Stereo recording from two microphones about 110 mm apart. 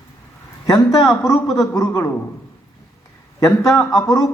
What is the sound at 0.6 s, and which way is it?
A man's voice, 35° left (ahead or behind).